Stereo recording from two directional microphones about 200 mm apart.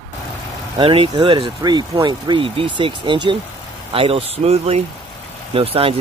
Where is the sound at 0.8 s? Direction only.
25° right (ahead or behind).